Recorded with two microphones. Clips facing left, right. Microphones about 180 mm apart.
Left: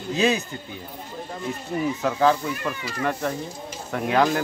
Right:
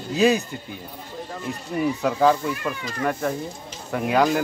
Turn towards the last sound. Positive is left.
turn(degrees=-5)  # may be behind; listen again after turning